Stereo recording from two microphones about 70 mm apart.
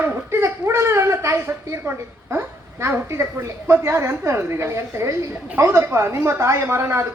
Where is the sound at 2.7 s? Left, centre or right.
Right.